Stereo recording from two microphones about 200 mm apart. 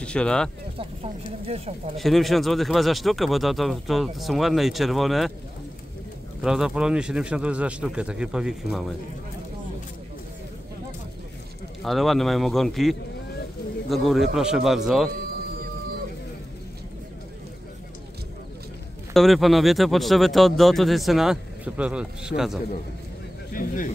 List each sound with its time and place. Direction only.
0.0 s speech: 5° left (ahead or behind)
0.7 s speech: 30° right (ahead or behind)
2.0 s speech: centre (ahead or behind)
6.4 s speech: 5° right (ahead or behind)
11.8 s speech: centre (ahead or behind)
19.1 s speech: centre (ahead or behind)
23.5 s bird: 45° left (ahead or behind)